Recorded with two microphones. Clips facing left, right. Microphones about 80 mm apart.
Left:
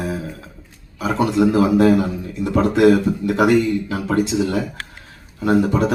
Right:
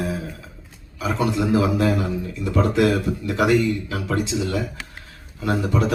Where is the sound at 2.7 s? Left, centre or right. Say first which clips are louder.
Left 6 dB; left.